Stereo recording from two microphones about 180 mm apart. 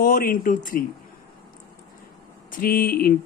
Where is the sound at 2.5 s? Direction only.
50° left (ahead or behind).